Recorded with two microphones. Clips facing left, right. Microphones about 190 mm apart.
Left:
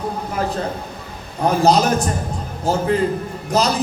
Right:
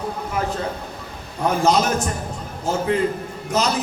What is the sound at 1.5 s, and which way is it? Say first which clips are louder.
Speech: left 3 dB; 35° left (ahead or behind).